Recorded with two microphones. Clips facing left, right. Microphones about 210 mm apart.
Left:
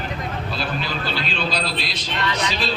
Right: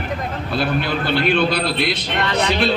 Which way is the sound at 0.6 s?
60° right (ahead or behind).